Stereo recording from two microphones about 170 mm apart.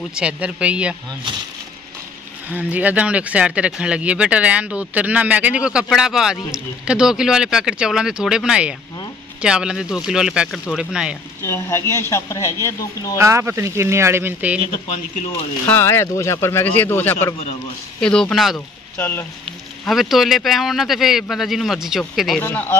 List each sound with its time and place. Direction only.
0.1 s speech: 5° right (ahead or behind)
2.5 s speech: 10° right (ahead or behind)
11.4 s speech: 15° left (ahead or behind)
13.2 s speech: 15° right (ahead or behind)
15.6 s speech: 15° left (ahead or behind)
18.9 s speech: 15° left (ahead or behind)
19.8 s speech: centre (ahead or behind)
22.4 s speech: 10° left (ahead or behind)